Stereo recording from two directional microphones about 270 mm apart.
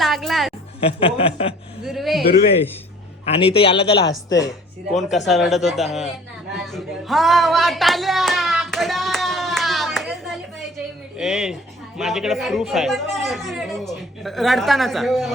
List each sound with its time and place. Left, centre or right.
0.0 s music: centre
0.8 s speech: left
1.8 s a sound: centre
3.2 s speech: left
4.9 s speech: centre
6.6 s a sound: centre
11.2 s speech: centre